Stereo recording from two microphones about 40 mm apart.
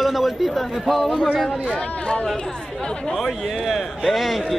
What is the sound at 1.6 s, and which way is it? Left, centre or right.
Speech, centre.